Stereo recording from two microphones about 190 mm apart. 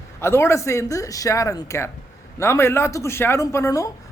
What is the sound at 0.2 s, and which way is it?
A man's voice, 15° left (ahead or behind).